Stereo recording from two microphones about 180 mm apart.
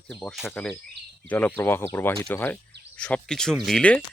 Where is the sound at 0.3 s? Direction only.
Centre (ahead or behind).